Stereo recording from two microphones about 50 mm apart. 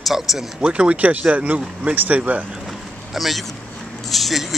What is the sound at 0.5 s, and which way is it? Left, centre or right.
Speech, centre.